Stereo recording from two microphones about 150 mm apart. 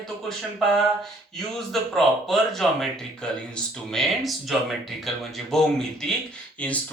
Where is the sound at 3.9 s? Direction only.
Centre (ahead or behind).